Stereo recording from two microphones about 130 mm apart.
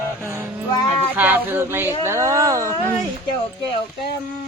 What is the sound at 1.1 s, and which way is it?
Speech, 15° right (ahead or behind).